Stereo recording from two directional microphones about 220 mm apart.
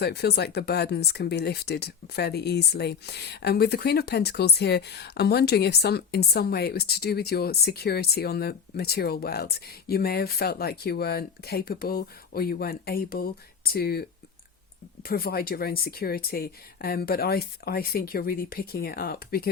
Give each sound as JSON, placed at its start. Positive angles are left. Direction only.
{"t": 0.0, "sound": "speech", "side_deg": 45}
{"t": 15.0, "sound": "speech", "side_deg": 45}